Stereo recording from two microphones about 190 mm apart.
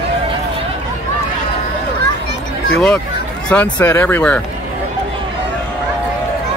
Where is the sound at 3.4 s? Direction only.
5° left (ahead or behind).